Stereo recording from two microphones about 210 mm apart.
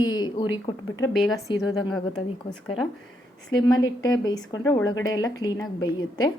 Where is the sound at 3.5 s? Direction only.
20° left (ahead or behind).